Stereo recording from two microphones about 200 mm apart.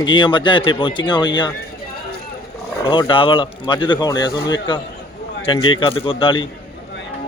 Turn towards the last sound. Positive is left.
turn(degrees=25)  # may be behind; listen again after turning